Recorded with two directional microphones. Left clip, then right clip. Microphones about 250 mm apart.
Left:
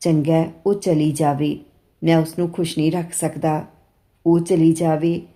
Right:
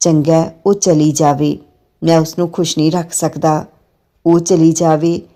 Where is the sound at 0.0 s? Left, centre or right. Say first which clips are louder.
Right 7 dB; right.